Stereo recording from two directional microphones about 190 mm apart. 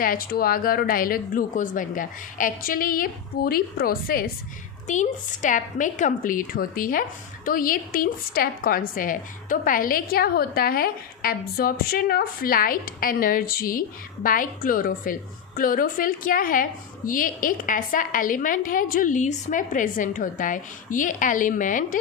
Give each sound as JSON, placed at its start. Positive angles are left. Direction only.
{"t": 0.0, "sound": "a woman's voice", "side_deg": 50}